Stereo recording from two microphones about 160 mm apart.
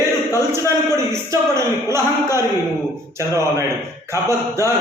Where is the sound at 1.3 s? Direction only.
15° right (ahead or behind).